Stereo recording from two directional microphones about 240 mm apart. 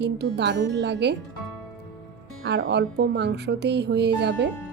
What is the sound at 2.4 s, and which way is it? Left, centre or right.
Speech, right.